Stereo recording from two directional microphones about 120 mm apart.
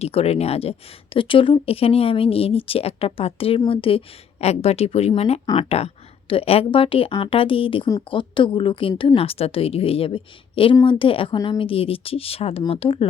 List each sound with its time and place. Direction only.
0.0 s a woman's voice: 55° left (ahead or behind)